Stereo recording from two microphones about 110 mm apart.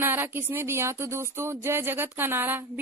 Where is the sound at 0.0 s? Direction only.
20° right (ahead or behind).